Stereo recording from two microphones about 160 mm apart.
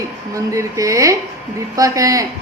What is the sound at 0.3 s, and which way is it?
Speech, 20° right (ahead or behind).